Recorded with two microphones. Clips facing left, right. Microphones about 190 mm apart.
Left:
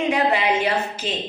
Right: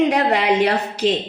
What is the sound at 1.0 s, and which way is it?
Speech, 85° right.